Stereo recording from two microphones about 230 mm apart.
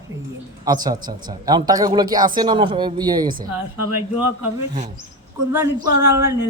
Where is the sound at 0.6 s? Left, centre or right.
Centre.